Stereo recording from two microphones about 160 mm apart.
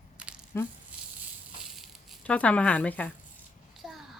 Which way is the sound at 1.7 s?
Centre (ahead or behind).